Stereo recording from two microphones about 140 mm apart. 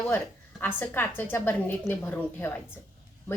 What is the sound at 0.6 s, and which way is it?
Speech, 15° left (ahead or behind).